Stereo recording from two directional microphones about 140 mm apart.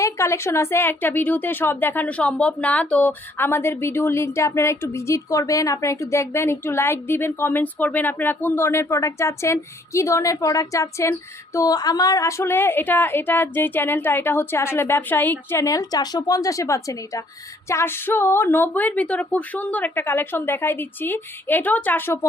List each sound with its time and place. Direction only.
0.0 s a woman's voice: 20° left (ahead or behind)